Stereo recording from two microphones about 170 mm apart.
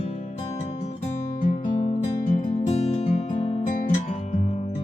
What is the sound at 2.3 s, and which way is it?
Music, 45° left (ahead or behind).